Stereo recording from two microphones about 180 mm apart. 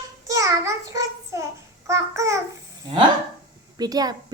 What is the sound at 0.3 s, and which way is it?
Child singing, 20° right (ahead or behind).